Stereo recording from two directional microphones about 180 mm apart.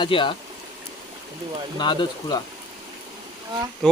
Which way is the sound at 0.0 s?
25° left (ahead or behind).